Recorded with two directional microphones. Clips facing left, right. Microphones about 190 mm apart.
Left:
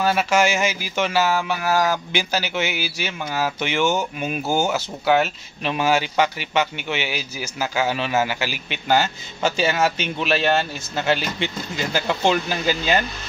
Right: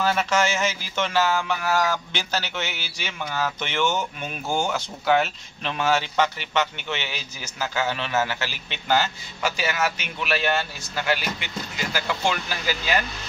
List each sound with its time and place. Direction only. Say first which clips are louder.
0.0 s speech: left 3 dB; 10° left (ahead or behind)
9.4 s a man's voice: left 5 dB; 30° left (ahead or behind)